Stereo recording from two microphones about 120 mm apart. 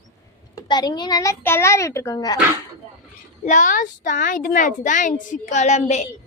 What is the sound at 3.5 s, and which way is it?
A child's voice, 90° left.